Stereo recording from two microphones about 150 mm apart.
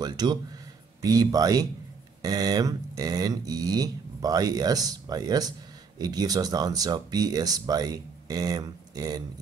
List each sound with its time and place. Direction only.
0.0 s speech: 25° right (ahead or behind)